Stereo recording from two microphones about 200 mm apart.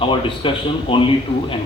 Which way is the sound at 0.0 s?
25° left (ahead or behind).